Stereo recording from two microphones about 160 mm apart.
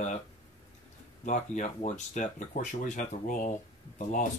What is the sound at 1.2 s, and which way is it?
Speech, 50° left (ahead or behind).